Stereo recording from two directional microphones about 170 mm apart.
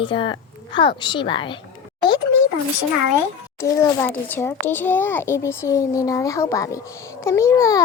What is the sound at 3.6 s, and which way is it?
A child's voice, 10° left (ahead or behind).